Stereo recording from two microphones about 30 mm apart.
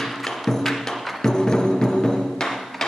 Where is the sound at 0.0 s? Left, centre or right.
Centre.